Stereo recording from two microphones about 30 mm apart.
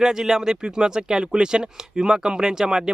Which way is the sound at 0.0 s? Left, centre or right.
Centre.